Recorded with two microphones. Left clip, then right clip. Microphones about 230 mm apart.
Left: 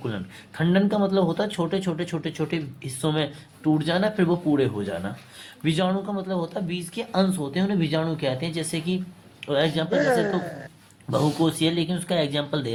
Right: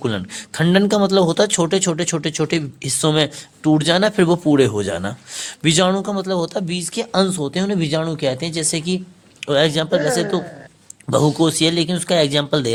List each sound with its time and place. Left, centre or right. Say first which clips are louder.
0.0 s speech: right 9 dB; right
9.9 s a woman's voice: right 3 dB; centre
11.1 s speech: right 7 dB; right